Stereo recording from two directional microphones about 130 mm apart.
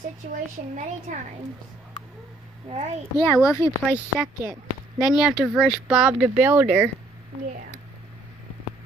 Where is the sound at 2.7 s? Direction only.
55° right (ahead or behind).